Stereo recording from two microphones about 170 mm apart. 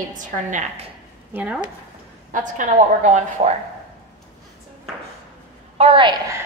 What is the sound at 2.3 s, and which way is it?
A woman's voice, 50° right (ahead or behind).